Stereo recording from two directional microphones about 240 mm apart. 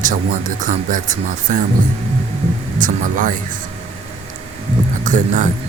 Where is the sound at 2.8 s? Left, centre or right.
Right.